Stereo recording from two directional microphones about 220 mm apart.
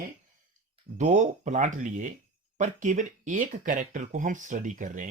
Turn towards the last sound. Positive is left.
turn(degrees=-35)  # may be behind; listen again after turning